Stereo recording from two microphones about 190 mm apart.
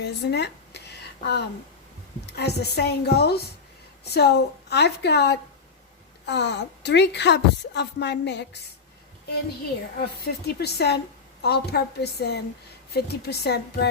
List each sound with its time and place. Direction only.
0.0 s a sound: 60° left (ahead or behind)
2.2 s a woman's voice: 60° left (ahead or behind)
10.0 s a woman's voice: 55° left (ahead or behind)